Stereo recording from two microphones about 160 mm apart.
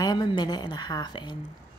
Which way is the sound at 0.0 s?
25° left (ahead or behind).